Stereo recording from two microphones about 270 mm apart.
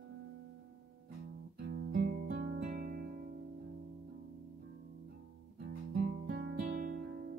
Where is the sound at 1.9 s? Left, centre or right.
Right.